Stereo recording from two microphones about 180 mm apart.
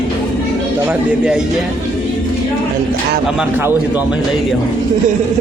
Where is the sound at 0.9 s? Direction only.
5° right (ahead or behind).